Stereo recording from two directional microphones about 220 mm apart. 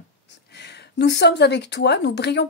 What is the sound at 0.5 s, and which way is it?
Speech, 50° left (ahead or behind).